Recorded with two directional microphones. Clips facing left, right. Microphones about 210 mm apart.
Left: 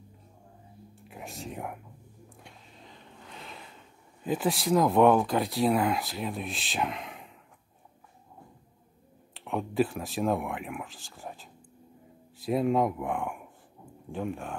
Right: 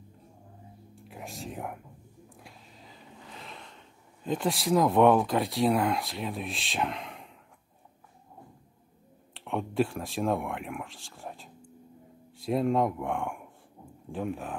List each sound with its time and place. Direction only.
1.0 s speech: centre (ahead or behind)
2.3 s a sound: centre (ahead or behind)
4.2 s speech: 5° left (ahead or behind)
9.3 s speech: centre (ahead or behind)